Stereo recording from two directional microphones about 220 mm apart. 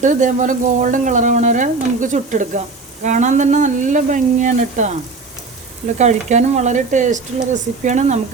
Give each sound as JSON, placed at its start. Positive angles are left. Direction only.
{"t": 0.0, "sound": "speech", "side_deg": -35}
{"t": 6.0, "sound": "speech", "side_deg": -30}